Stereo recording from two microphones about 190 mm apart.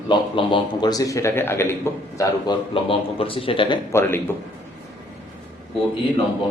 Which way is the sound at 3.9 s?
10° left (ahead or behind).